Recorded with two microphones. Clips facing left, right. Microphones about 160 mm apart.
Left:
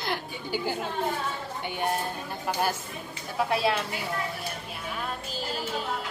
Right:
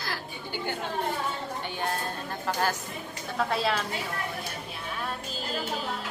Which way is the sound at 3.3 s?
10° left (ahead or behind).